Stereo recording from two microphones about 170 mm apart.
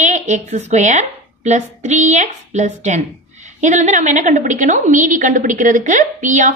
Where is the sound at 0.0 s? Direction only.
45° right (ahead or behind).